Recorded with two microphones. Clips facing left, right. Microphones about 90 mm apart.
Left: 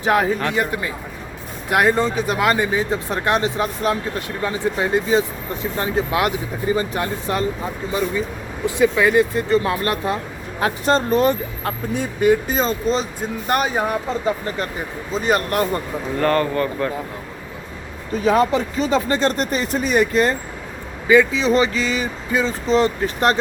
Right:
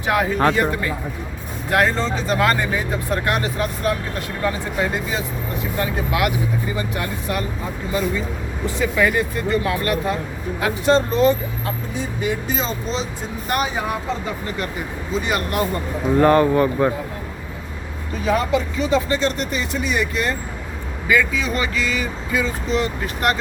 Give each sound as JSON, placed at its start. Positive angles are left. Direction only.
{"t": 0.0, "sound": "speech", "side_deg": 30}
{"t": 0.5, "sound": "speech", "side_deg": 15}
{"t": 2.7, "sound": "speech", "side_deg": 20}
{"t": 8.6, "sound": "speech", "side_deg": 20}
{"t": 10.6, "sound": "speech", "side_deg": 45}
{"t": 15.2, "sound": "speech", "side_deg": 40}
{"t": 16.1, "sound": "speech", "side_deg": -10}
{"t": 18.3, "sound": "speech", "side_deg": 35}
{"t": 21.1, "sound": "speech", "side_deg": 25}